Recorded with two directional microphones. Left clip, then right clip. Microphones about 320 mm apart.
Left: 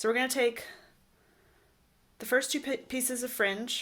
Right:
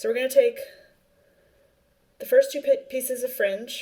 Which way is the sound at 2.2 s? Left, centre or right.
Left.